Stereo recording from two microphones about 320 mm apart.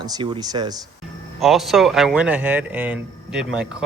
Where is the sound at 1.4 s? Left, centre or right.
Centre.